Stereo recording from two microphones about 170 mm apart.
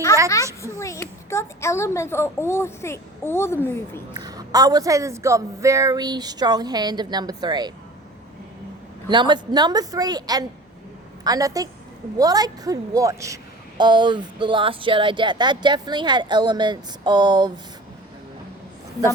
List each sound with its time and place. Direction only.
0.6 s speech: 15° left (ahead or behind)
4.2 s a woman's voice: 20° right (ahead or behind)
9.0 s a woman's voice: 25° right (ahead or behind)